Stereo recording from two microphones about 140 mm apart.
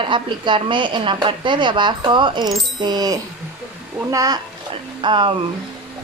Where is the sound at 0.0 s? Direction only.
35° right (ahead or behind).